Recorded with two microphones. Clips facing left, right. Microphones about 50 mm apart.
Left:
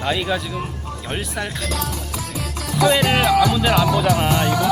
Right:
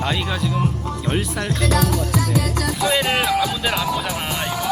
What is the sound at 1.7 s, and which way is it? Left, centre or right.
Music, right.